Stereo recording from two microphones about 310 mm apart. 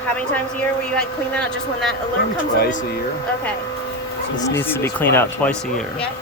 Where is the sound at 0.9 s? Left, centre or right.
Centre.